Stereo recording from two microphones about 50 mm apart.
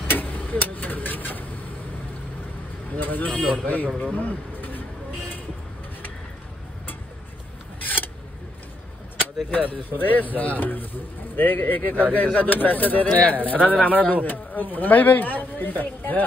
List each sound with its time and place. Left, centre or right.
0.1 s vehicle: left
3.0 s a man's voice: left
7.8 s scissors: left
9.5 s speech: left